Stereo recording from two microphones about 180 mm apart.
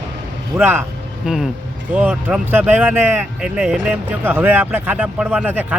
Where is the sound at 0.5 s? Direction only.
10° right (ahead or behind).